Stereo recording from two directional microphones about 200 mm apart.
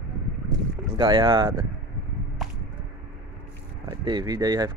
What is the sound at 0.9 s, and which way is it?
Speech, 25° right (ahead or behind).